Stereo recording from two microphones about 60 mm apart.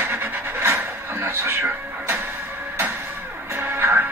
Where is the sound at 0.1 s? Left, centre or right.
Right.